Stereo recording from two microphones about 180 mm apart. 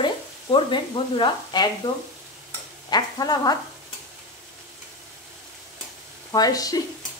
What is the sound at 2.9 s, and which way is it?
Speech, 25° left (ahead or behind).